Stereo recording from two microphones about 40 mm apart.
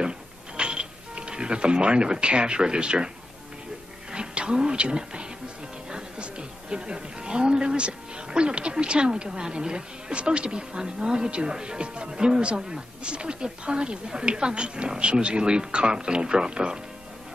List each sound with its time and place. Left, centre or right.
0.6 s speech: right
4.1 s a woman's voice: right